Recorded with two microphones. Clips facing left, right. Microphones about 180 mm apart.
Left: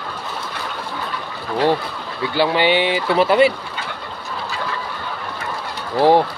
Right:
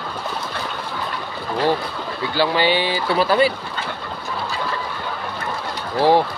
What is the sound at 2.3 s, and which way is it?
Speech, 25° left (ahead or behind).